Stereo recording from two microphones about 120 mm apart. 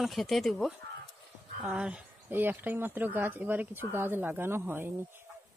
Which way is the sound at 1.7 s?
10° right (ahead or behind).